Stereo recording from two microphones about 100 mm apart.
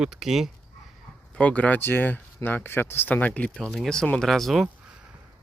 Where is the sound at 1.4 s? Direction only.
15° left (ahead or behind).